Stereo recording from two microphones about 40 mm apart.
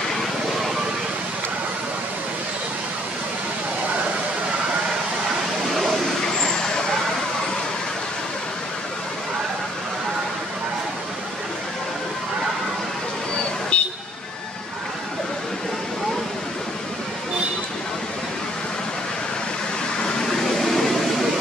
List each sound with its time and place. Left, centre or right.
6.4 s vehicle: centre
13.7 s vehicle: left
20.0 s a sound: centre